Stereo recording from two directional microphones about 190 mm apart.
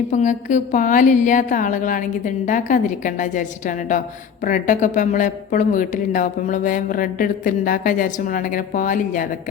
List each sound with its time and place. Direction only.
0.1 s speech: 40° left (ahead or behind)